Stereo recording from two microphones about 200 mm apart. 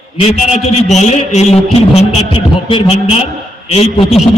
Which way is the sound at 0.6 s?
30° left (ahead or behind).